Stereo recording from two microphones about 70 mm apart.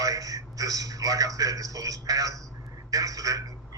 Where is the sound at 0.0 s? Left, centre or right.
Right.